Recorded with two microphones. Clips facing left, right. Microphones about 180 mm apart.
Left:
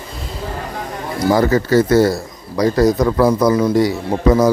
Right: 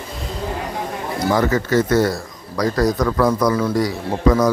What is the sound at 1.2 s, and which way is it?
Speech, 35° left (ahead or behind).